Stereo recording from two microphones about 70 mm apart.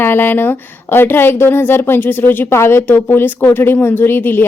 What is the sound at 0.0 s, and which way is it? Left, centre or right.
A woman's voice, left.